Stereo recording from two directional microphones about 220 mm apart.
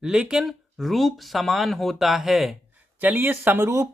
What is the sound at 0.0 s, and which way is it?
Speech, 5° right (ahead or behind).